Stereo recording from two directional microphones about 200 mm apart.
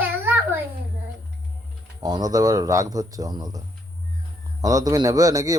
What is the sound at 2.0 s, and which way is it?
Speech, 20° right (ahead or behind).